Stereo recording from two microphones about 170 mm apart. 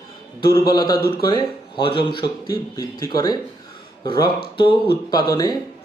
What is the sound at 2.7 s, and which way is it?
Speech, 20° left (ahead or behind).